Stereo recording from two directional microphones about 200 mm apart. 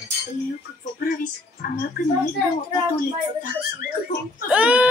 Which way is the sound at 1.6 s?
45° left (ahead or behind).